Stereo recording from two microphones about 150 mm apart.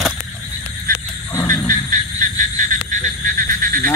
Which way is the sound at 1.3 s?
15° left (ahead or behind).